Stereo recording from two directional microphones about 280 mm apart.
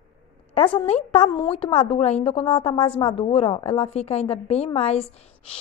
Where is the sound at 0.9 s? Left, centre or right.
Centre.